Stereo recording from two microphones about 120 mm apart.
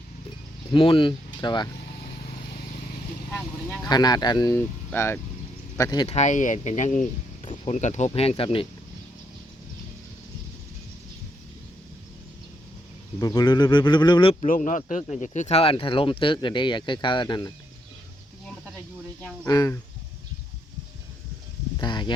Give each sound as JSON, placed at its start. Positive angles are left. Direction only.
{"t": 0.7, "sound": "speech", "side_deg": 45}
{"t": 3.8, "sound": "speech", "side_deg": 35}
{"t": 4.5, "sound": "speech", "side_deg": 20}
{"t": 5.7, "sound": "speech", "side_deg": 30}
{"t": 6.1, "sound": "speech", "side_deg": 80}
{"t": 7.7, "sound": "speech", "side_deg": 75}
{"t": 13.1, "sound": "speech", "side_deg": 30}
{"t": 14.4, "sound": "speech", "side_deg": 90}
{"t": 19.5, "sound": "speech", "side_deg": 30}
{"t": 21.8, "sound": "speech", "side_deg": 40}